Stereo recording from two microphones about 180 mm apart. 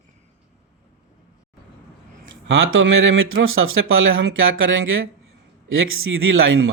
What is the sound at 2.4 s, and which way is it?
Speech, 90° right.